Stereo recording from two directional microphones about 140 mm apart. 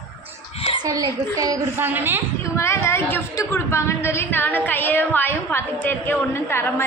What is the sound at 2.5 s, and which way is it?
A woman's voice, 20° left (ahead or behind).